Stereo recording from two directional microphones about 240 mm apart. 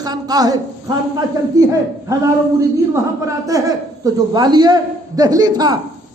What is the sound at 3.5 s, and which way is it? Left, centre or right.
A man's voice, centre.